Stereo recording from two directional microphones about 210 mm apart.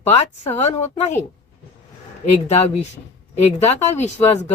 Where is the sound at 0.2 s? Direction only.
30° left (ahead or behind).